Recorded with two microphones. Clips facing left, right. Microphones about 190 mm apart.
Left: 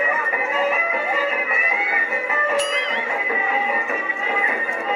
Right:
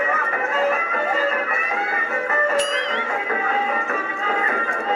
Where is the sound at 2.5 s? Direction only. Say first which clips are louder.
Right 1 dB; centre (ahead or behind).